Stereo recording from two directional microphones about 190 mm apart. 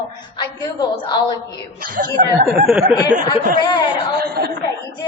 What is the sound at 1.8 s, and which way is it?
Speech, 50° right (ahead or behind).